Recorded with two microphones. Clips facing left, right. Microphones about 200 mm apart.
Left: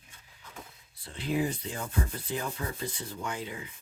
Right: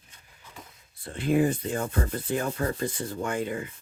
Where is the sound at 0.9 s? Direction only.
50° right (ahead or behind).